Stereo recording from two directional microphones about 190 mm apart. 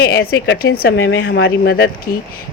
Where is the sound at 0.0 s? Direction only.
55° left (ahead or behind).